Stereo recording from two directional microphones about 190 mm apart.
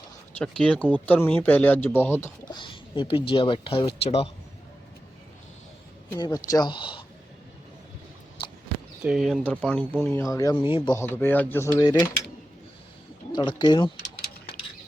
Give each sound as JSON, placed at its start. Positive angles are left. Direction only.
{"t": 0.3, "sound": "speech", "side_deg": 5}
{"t": 2.5, "sound": "speech", "side_deg": 25}
{"t": 6.1, "sound": "speech", "side_deg": 20}
{"t": 9.0, "sound": "speech", "side_deg": -5}
{"t": 10.9, "sound": "speech", "side_deg": 10}
{"t": 13.3, "sound": "speech", "side_deg": 25}